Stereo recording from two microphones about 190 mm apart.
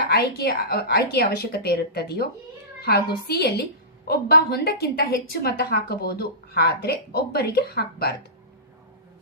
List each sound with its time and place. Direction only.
0.1 s a woman's voice: 55° left (ahead or behind)